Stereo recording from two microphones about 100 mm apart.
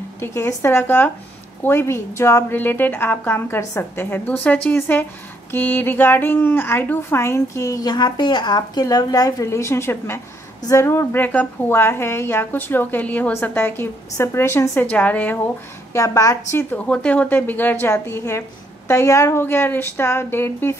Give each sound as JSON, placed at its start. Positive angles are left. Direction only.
{"t": 0.2, "sound": "a woman's voice", "side_deg": 25}
{"t": 15.9, "sound": "a woman's voice", "side_deg": 30}
{"t": 16.5, "sound": "a woman's voice", "side_deg": 15}